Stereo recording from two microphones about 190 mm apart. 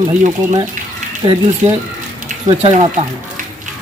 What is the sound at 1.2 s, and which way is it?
Speech, 25° right (ahead or behind).